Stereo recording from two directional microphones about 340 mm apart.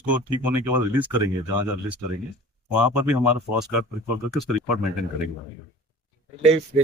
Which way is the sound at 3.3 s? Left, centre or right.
Centre.